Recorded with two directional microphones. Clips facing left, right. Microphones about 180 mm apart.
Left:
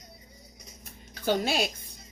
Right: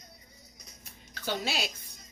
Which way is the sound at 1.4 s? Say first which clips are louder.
Left 6 dB; 55° left (ahead or behind).